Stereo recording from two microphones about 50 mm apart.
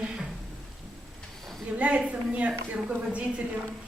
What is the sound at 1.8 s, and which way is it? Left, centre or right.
A woman's voice, right.